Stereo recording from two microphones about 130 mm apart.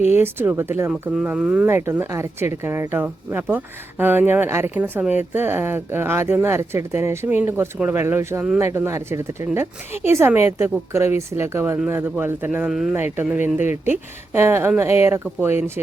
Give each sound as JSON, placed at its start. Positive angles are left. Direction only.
{"t": 0.2, "sound": "a woman's voice", "side_deg": -15}
{"t": 13.1, "sound": "a woman's voice", "side_deg": -15}